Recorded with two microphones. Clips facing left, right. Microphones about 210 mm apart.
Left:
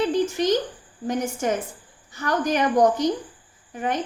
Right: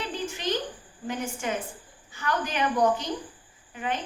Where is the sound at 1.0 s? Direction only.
40° left (ahead or behind).